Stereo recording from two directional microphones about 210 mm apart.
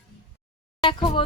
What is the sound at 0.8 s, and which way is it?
Speech, 25° left (ahead or behind).